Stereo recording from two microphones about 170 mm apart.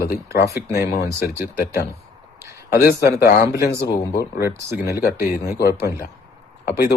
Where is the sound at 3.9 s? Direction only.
20° left (ahead or behind).